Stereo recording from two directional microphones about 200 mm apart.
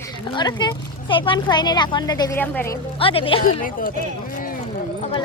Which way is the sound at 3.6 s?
45° left (ahead or behind).